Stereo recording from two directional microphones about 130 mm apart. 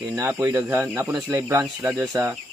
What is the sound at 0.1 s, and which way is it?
Speech, 20° right (ahead or behind).